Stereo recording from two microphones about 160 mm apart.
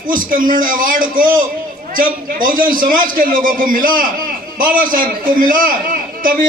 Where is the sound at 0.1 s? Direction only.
60° right (ahead or behind).